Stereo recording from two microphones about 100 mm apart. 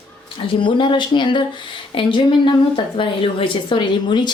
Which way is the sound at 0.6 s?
55° left (ahead or behind).